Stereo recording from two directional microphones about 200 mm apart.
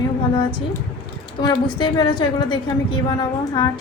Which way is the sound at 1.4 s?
20° left (ahead or behind).